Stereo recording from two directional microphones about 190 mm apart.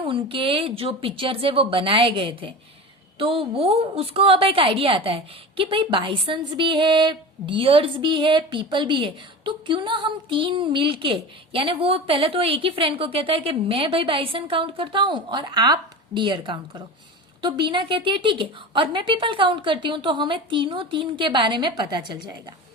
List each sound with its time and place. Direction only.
0.0 s a woman's voice: 25° right (ahead or behind)